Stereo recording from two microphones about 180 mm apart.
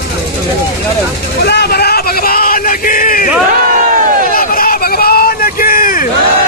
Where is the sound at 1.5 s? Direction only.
65° left (ahead or behind).